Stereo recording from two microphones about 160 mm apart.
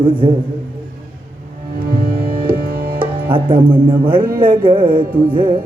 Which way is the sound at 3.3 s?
30° right (ahead or behind).